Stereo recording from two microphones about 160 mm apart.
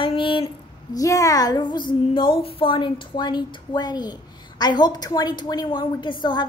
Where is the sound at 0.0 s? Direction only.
30° left (ahead or behind).